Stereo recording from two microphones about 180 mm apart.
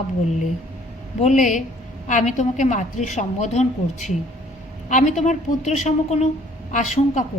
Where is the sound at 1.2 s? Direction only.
45° left (ahead or behind).